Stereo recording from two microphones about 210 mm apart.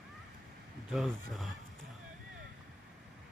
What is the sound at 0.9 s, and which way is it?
Speech, centre (ahead or behind).